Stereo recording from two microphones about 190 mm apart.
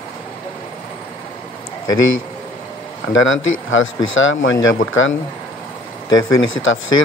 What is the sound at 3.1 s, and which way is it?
Speech, 90° left.